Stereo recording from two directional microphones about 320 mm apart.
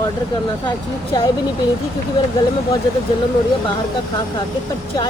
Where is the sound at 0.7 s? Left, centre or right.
Centre.